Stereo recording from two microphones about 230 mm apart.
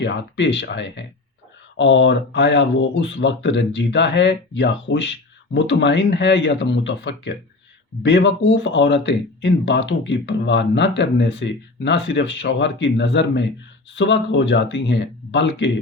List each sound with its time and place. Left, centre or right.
0.0 s speech: left